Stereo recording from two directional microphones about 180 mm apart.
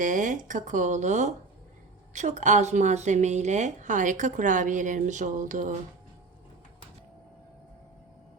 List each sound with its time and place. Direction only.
0.0 s a woman's voice: 45° right (ahead or behind)